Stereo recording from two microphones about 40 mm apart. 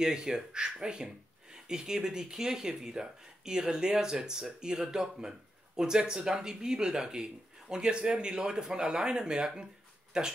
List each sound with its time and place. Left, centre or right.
0.0 s speech: centre